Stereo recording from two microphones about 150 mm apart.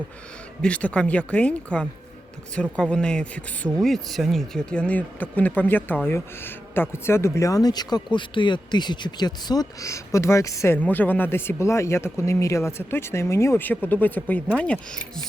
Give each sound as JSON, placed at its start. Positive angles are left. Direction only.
{"t": 0.6, "sound": "speech", "side_deg": 10}